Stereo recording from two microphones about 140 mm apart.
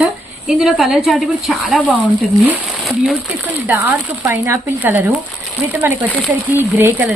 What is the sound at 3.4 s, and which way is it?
Speech, 15° right (ahead or behind).